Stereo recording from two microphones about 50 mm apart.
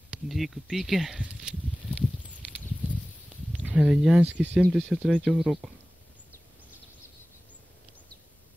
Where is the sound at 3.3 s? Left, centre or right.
Right.